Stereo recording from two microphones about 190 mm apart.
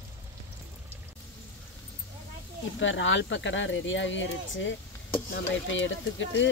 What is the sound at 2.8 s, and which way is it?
Speech, 80° left.